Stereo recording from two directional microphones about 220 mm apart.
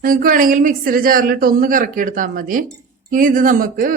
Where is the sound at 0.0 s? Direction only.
40° right (ahead or behind).